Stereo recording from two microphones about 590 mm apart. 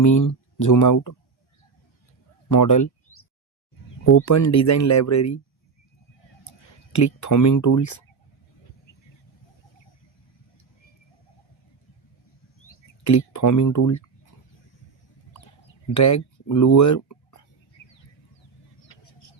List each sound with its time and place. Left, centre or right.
0.0 s speech: left
2.5 s a sound: left
4.0 s speech: left
6.9 s speech: left
12.6 s speech: left
16.0 s speech: left